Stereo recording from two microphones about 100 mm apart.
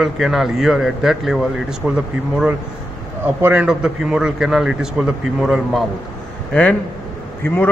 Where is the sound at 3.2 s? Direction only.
20° right (ahead or behind).